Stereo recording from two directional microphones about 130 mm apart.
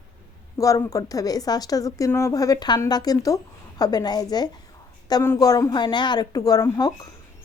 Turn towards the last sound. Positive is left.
turn(degrees=35)  # may be behind; listen again after turning